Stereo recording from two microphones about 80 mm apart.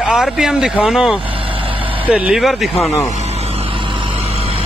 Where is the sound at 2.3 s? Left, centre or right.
Centre.